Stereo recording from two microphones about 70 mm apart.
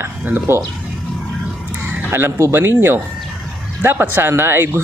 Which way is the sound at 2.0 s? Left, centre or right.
Right.